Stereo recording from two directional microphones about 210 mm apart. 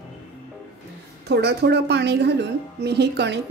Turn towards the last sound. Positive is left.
turn(degrees=-50)  # may be behind; listen again after turning